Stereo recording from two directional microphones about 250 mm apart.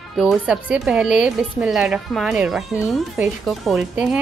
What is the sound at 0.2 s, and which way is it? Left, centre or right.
A woman's voice, centre.